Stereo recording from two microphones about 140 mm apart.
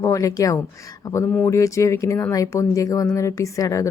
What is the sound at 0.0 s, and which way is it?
Speech, 25° left (ahead or behind).